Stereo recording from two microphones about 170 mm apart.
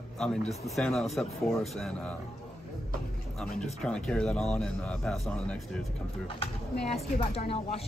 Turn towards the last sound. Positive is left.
turn(degrees=35)  # may be behind; listen again after turning